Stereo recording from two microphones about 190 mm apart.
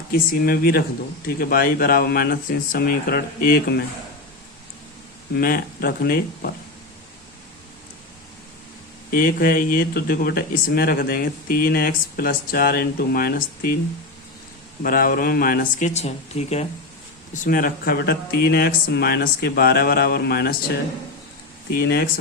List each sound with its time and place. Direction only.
0.1 s speech: 55° left (ahead or behind)
5.3 s speech: 50° left (ahead or behind)
9.0 s speech: 50° left (ahead or behind)
14.8 s speech: 50° left (ahead or behind)
16.0 s speech: 35° left (ahead or behind); by 20.6 s 55° left (ahead or behind)
21.8 s speech: 55° left (ahead or behind)